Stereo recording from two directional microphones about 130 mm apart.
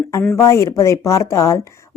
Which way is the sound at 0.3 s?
25° left (ahead or behind).